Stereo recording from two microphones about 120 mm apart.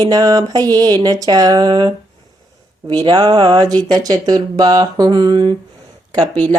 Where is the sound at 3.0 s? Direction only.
40° right (ahead or behind).